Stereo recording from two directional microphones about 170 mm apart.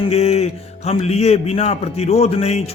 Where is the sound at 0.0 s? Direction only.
35° left (ahead or behind).